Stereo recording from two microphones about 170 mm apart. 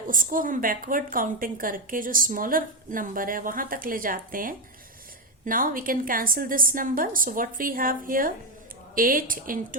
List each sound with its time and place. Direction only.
0.1 s a woman's voice: 55° right (ahead or behind)